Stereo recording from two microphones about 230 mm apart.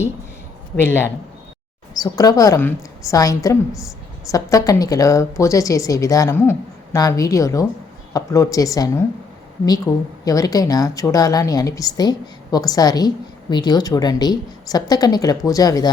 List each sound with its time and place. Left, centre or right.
0.8 s speech: centre